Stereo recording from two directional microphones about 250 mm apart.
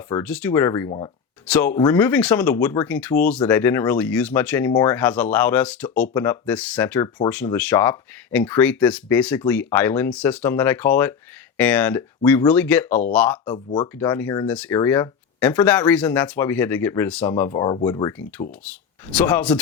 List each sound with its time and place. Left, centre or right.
0.1 s speech: centre
1.5 s speech: centre
13.7 s speech: centre
18.6 s speech: centre